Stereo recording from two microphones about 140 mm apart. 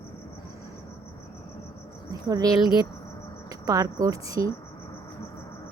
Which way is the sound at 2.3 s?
25° right (ahead or behind).